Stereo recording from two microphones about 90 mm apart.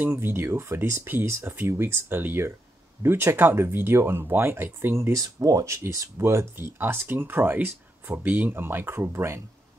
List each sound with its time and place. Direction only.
0.0 s speech: 25° right (ahead or behind)